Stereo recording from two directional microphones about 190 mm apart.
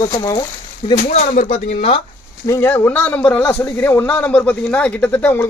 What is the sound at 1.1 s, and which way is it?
Speech, 40° left (ahead or behind).